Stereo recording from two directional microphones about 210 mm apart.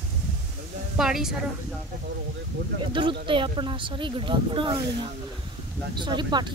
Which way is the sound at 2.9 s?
25° right (ahead or behind).